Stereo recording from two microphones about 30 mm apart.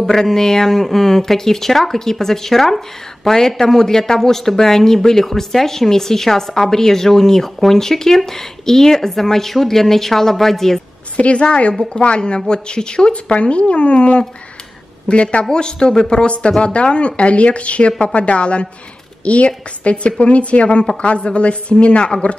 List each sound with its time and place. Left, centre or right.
0.0 s speech: centre
11.1 s a woman's voice: left
13.1 s a man's voice: left
15.5 s a woman's voice: left
16.6 s a woman's voice: left